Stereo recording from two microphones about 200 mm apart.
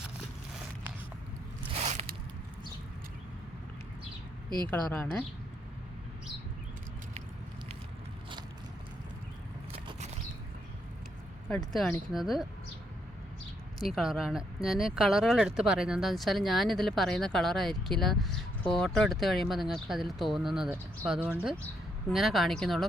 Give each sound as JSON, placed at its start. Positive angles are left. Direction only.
{"t": 1.7, "sound": "biting", "side_deg": -35}
{"t": 4.7, "sound": "speech", "side_deg": 5}
{"t": 9.7, "sound": "a sound", "side_deg": -30}
{"t": 11.4, "sound": "speech", "side_deg": 0}
{"t": 13.8, "sound": "speech", "side_deg": 0}